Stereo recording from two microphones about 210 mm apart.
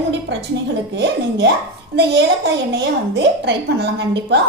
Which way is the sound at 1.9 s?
55° right (ahead or behind).